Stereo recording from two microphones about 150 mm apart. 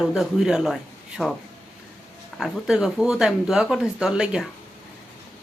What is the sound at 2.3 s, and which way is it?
Speech, 5° right (ahead or behind).